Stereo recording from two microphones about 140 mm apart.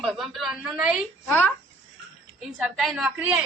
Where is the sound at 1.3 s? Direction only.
15° left (ahead or behind).